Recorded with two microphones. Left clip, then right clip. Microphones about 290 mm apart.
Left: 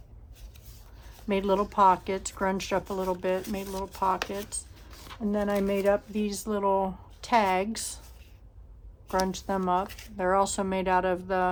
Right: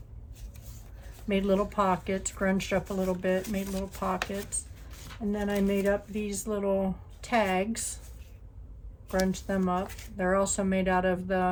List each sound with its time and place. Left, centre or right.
1.3 s a woman's voice: centre
5.0 s a woman's voice: centre
9.3 s a woman's voice: centre
9.8 s speech: centre
10.2 s a woman's voice: centre